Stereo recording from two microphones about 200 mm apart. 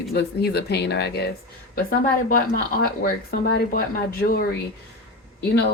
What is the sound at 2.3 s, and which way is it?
Speech, 45° left (ahead or behind).